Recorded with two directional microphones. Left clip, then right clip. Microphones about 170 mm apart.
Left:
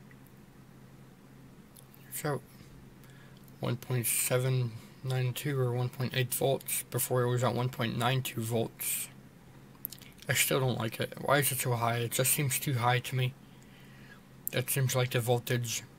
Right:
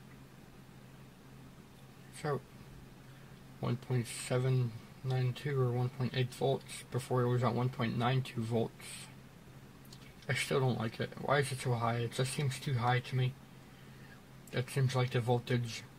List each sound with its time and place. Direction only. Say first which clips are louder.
3.6 s speech: left 3 dB; 15° left (ahead or behind)
10.2 s speech: left 4 dB; 15° left (ahead or behind)
14.5 s speech: left 4 dB; 15° left (ahead or behind)